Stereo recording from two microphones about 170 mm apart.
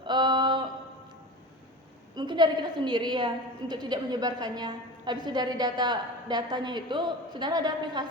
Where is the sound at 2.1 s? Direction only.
25° right (ahead or behind).